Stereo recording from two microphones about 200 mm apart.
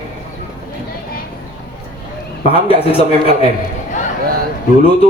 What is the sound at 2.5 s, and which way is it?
Speech, 30° left (ahead or behind).